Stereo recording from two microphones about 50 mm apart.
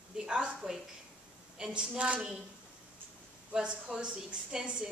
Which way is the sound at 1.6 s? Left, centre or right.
Centre.